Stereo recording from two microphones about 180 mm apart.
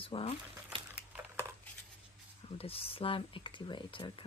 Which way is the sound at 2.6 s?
30° left (ahead or behind).